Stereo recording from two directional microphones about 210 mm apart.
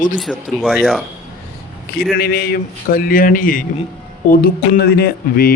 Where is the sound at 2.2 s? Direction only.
45° left (ahead or behind).